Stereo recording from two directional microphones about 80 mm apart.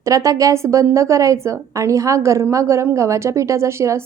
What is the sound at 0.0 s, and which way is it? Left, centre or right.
A woman's voice, right.